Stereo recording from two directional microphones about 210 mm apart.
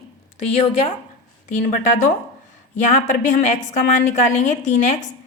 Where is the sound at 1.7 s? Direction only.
35° left (ahead or behind).